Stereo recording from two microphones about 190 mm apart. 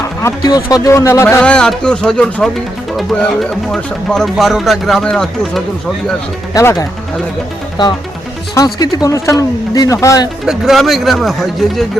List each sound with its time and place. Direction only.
0.2 s a man's voice: 15° left (ahead or behind)
6.5 s a man's voice: 15° left (ahead or behind)
8.5 s a man's voice: 20° left (ahead or behind)
10.4 s speech: centre (ahead or behind)